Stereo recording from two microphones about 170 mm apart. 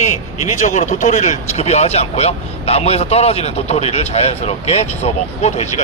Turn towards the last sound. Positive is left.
turn(degrees=40)  # may be behind; listen again after turning